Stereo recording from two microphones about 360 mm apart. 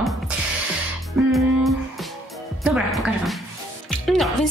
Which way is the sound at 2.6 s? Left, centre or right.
Centre.